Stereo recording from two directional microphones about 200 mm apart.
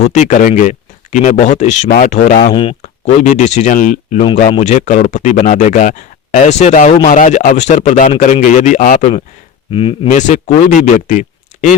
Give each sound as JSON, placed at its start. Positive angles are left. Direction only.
{"t": 0.0, "sound": "speech", "side_deg": 35}
{"t": 2.5, "sound": "speech", "side_deg": 25}
{"t": 9.7, "sound": "speech", "side_deg": 25}
{"t": 10.1, "sound": "speech", "side_deg": 40}